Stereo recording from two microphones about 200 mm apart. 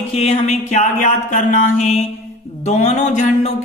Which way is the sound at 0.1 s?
30° left (ahead or behind).